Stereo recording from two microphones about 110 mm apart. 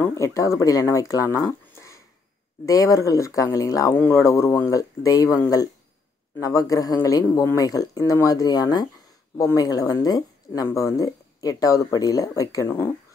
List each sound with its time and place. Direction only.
0.0 s speech: 25° left (ahead or behind)
6.4 s speech: 30° left (ahead or behind)